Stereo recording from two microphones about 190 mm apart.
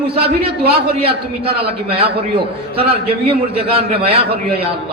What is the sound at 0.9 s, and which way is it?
Speech, 30° right (ahead or behind).